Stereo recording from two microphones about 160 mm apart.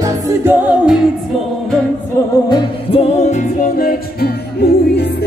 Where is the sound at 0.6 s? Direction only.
5° right (ahead or behind).